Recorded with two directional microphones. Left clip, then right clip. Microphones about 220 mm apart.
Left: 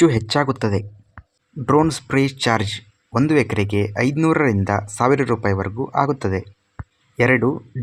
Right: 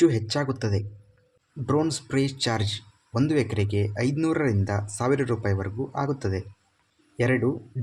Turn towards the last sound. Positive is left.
turn(degrees=30)  # may be behind; listen again after turning